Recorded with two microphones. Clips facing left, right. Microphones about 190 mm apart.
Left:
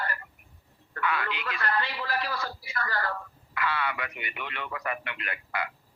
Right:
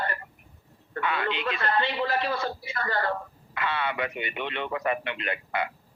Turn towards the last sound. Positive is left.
turn(degrees=-25)  # may be behind; listen again after turning